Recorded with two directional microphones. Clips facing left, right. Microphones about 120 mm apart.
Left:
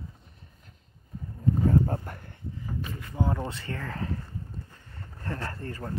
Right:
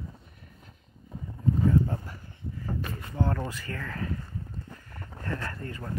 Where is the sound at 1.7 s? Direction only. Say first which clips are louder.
Left 1 dB; 45° left (ahead or behind).